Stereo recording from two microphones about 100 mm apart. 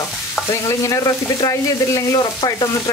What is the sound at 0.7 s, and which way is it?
Stir, 30° left (ahead or behind).